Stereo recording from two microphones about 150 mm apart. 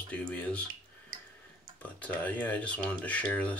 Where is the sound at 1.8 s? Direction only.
10° left (ahead or behind).